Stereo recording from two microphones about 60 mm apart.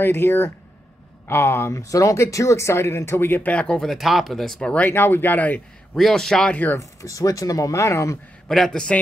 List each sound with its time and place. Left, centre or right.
0.0 s speech: left
3.5 s a man's voice: centre
3.8 s speech: centre
4.6 s a man's voice: centre
4.8 s speech: left
5.9 s a man's voice: centre
6.5 s speech: left
6.8 s speech: left
8.5 s a man's voice: centre